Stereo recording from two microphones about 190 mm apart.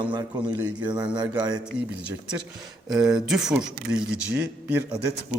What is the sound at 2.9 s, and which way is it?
A man's voice, 5° right (ahead or behind).